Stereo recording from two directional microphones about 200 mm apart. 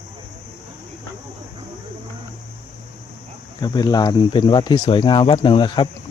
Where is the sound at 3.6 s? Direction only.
20° left (ahead or behind).